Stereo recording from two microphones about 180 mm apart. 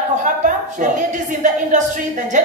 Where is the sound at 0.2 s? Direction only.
45° right (ahead or behind).